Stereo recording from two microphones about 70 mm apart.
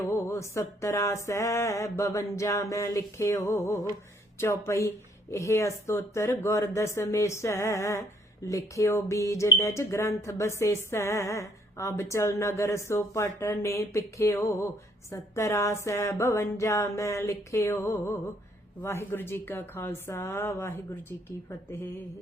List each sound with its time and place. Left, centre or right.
0.0 s speech: left
4.4 s speech: left